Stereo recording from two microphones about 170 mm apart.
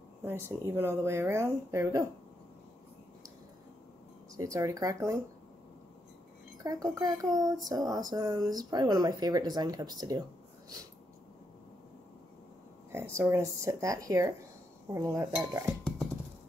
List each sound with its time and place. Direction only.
0.2 s speech: 15° right (ahead or behind)
4.4 s speech: 20° right (ahead or behind)
6.6 s speech: 20° right (ahead or behind)
12.9 s speech: 15° right (ahead or behind)